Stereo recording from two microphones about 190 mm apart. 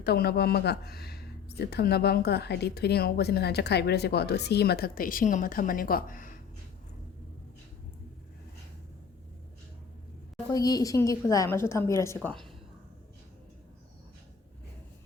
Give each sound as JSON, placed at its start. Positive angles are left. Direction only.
{"t": 0.0, "sound": "speech", "side_deg": 55}
{"t": 10.5, "sound": "a woman's voice", "side_deg": 20}